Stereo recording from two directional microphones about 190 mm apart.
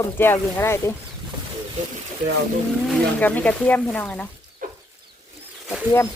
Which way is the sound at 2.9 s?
10° left (ahead or behind).